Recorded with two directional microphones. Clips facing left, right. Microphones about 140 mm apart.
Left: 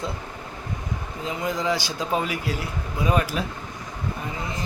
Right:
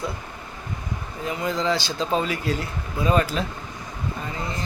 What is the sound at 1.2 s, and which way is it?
A man's voice, 20° left (ahead or behind).